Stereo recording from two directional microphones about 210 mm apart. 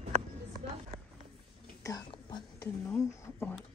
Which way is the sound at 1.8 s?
15° left (ahead or behind).